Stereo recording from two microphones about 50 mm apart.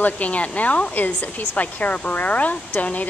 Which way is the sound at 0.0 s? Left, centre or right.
Left.